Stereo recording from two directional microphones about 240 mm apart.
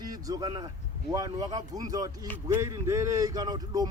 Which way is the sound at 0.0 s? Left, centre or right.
Centre.